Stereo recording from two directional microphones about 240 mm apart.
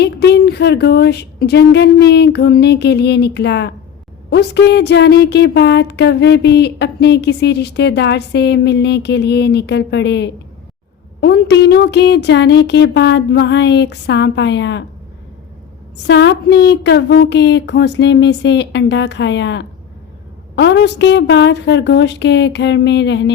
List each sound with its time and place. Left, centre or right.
0.0 s speech: left
16.0 s speech: left